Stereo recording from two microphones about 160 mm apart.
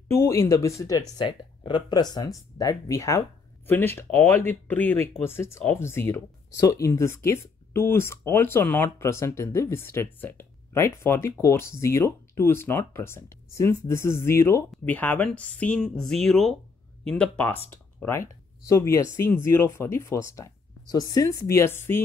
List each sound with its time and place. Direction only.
0.1 s speech: 15° left (ahead or behind)